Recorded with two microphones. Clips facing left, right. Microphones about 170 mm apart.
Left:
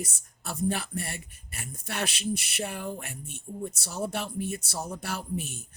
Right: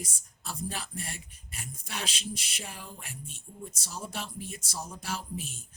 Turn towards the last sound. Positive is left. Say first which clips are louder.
# left 3 dB
turn(degrees=65)  # may be behind; listen again after turning